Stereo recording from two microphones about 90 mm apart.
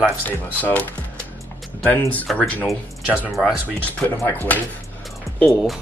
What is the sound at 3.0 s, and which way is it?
Speech, 15° right (ahead or behind).